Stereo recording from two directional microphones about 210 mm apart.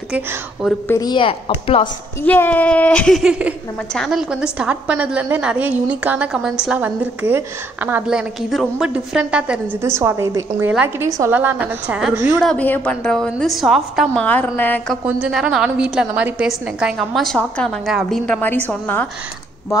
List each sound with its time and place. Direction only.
0.1 s a woman's voice: 5° right (ahead or behind)
0.8 s speech: 15° left (ahead or behind)
2.2 s a woman's voice: 10° left (ahead or behind)
15.0 s a woman's voice: 5° right (ahead or behind)